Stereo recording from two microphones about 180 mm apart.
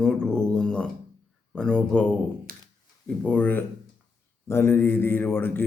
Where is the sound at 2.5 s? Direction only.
50° right (ahead or behind).